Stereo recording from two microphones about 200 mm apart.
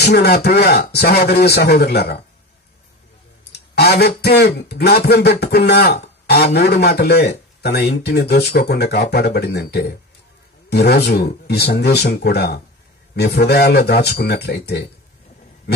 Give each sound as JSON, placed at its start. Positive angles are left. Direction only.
{"t": 0.0, "sound": "speech", "side_deg": 55}
{"t": 3.7, "sound": "a sound", "side_deg": 55}
{"t": 4.2, "sound": "speech", "side_deg": 55}